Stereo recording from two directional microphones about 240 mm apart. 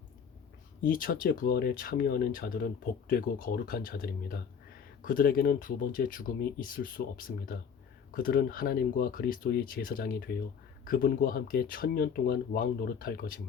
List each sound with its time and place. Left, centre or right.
0.8 s speech: left